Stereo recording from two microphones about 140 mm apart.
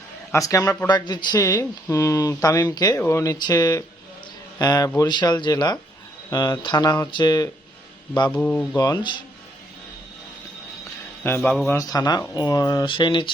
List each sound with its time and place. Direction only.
0.3 s speech: 25° left (ahead or behind)
8.3 s speech: 10° left (ahead or behind)
8.7 s speech: 25° left (ahead or behind)
11.2 s speech: 15° left (ahead or behind)
11.4 s a man's voice: 5° left (ahead or behind)
11.7 s speech: 25° left (ahead or behind)